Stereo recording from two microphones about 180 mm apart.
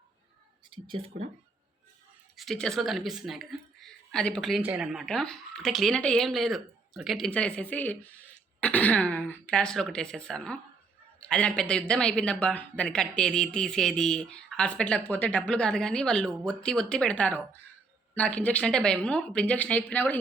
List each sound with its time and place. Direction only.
0.7 s speech: 30° right (ahead or behind)
2.3 s speech: centre (ahead or behind)